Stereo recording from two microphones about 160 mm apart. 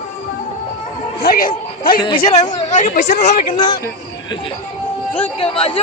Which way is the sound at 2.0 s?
30° left (ahead or behind).